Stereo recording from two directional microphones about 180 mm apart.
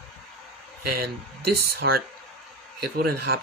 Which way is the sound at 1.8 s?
80° right.